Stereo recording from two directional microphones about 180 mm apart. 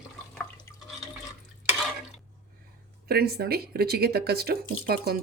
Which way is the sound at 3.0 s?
60° right (ahead or behind).